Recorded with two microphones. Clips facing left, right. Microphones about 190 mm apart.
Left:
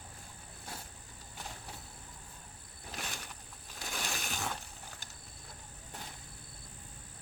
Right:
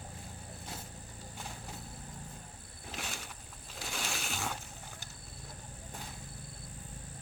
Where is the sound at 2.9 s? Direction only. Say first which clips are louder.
Right 1 dB; 5° right (ahead or behind).